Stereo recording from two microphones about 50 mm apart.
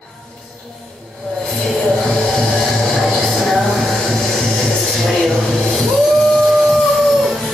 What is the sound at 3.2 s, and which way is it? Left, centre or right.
Music, centre.